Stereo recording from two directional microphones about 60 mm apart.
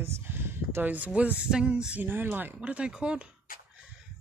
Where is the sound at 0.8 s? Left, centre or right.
Right.